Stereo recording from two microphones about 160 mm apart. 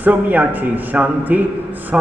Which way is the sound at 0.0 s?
10° right (ahead or behind).